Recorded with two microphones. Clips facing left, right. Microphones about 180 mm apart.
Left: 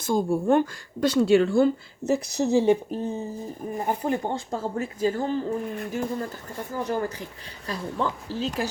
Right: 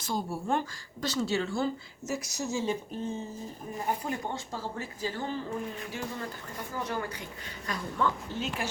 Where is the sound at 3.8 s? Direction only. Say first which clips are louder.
Left 6 dB; 50° left (ahead or behind).